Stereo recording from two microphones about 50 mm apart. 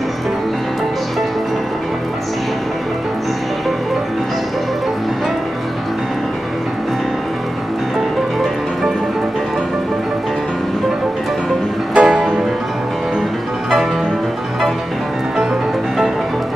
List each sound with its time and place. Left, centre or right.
11.9 s music: right